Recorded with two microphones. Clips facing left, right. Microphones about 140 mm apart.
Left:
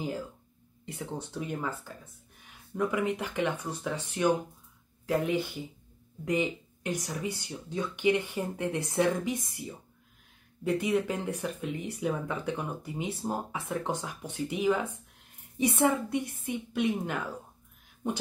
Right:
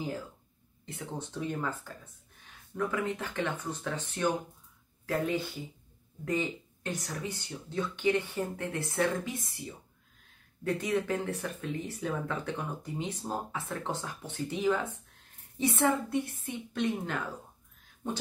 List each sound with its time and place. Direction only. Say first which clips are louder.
0.8 s speech: left 2 dB; 10° left (ahead or behind)
10.6 s speech: left 3 dB; 10° left (ahead or behind)